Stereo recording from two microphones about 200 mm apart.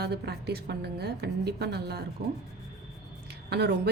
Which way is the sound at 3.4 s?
55° right (ahead or behind).